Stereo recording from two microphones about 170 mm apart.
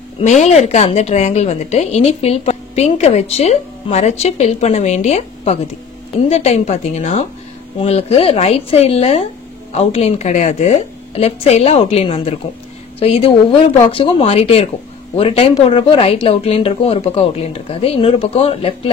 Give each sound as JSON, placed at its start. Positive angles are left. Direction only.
{"t": 0.2, "sound": "speech", "side_deg": 45}